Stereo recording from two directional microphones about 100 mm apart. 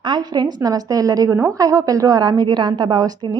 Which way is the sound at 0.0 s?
45° right (ahead or behind).